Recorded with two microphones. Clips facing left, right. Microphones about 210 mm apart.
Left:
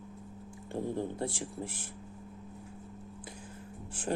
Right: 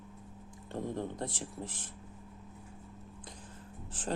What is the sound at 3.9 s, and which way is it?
Speech, 10° left (ahead or behind).